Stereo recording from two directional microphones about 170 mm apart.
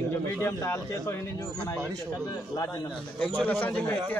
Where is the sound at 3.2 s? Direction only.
5° left (ahead or behind).